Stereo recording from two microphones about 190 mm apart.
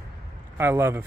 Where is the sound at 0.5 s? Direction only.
15° right (ahead or behind).